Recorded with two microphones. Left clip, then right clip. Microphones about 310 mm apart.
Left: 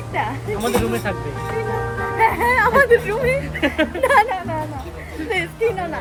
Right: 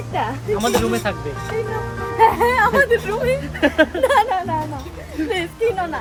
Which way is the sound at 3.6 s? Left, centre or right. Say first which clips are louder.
Right 5 dB; centre.